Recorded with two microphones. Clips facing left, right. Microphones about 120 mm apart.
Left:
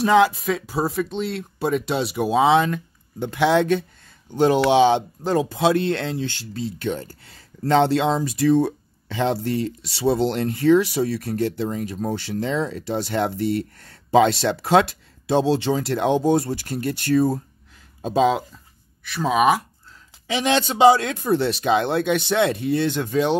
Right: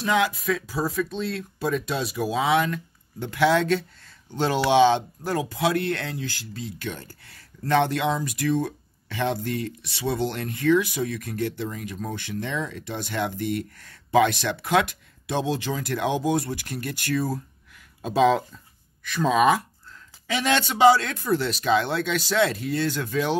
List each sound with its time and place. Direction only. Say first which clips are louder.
0.0 s speech: left 7 dB; 30° left (ahead or behind)
19.0 s speech: left 1 dB; 5° left (ahead or behind)
20.2 s speech: left 3 dB; 25° left (ahead or behind)